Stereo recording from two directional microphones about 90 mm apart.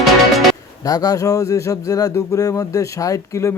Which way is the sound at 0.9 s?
40° left (ahead or behind).